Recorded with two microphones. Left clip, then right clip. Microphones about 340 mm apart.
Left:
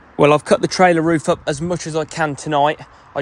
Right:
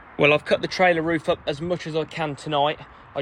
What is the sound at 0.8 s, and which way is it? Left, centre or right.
Speech, left.